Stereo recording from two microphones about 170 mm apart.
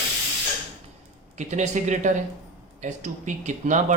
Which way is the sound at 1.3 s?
45° right (ahead or behind).